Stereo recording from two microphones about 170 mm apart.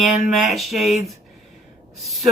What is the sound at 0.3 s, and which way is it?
Speech, centre (ahead or behind).